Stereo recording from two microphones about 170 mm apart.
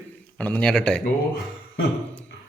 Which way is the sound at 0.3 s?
10° left (ahead or behind).